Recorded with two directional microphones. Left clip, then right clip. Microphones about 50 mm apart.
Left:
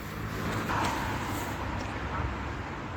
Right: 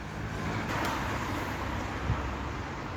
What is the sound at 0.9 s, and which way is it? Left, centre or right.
Vehicle, right.